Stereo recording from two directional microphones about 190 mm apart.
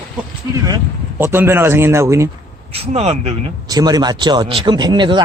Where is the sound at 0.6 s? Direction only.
15° right (ahead or behind).